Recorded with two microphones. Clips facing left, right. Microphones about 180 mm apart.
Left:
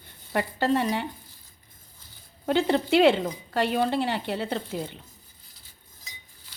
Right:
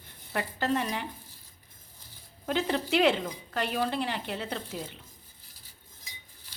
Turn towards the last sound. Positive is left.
turn(degrees=35)  # may be behind; listen again after turning